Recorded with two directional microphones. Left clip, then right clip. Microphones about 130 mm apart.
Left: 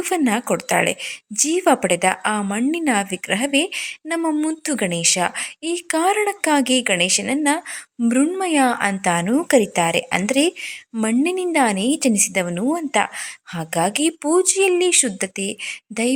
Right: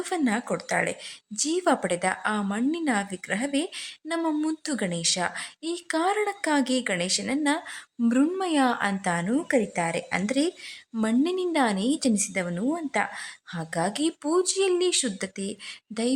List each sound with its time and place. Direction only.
0.0 s speech: 30° left (ahead or behind)